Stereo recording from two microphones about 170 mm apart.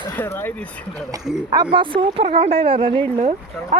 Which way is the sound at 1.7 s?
30° right (ahead or behind).